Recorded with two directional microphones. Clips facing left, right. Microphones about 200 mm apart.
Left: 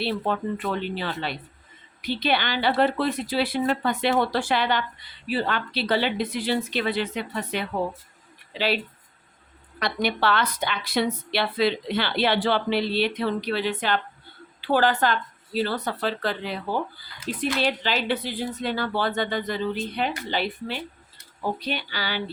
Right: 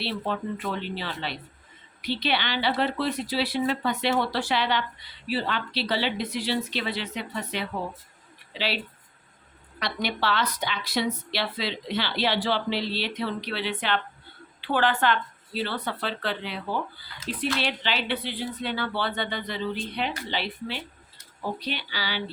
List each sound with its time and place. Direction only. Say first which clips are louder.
0.9 s a woman's voice: left 3 dB; 50° left (ahead or behind)
9.8 s a woman's voice: left 4 dB; 50° left (ahead or behind)